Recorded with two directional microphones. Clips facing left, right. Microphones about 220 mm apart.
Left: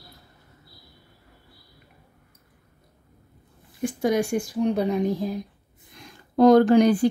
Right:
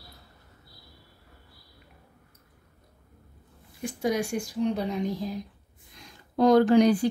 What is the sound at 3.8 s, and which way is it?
Speech, 50° left (ahead or behind).